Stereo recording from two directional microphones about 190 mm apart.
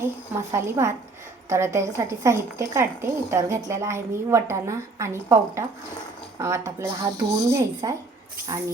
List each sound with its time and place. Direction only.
0.0 s a woman's voice: 15° right (ahead or behind)